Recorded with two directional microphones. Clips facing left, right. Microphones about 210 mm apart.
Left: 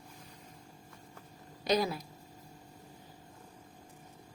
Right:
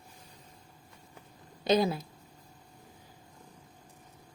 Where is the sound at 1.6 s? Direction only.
25° right (ahead or behind).